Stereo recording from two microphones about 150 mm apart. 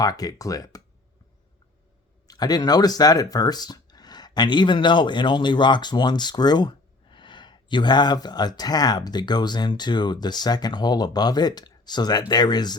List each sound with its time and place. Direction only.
0.0 s speech: 25° left (ahead or behind)
2.2 s speech: 25° left (ahead or behind)